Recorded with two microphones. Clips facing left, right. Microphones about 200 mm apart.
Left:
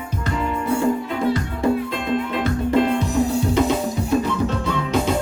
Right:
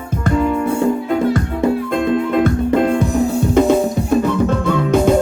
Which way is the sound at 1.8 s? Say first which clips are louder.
Right 6 dB; 50° right (ahead or behind).